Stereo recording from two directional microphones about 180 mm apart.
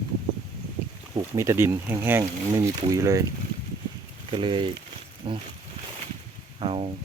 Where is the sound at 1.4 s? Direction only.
15° right (ahead or behind).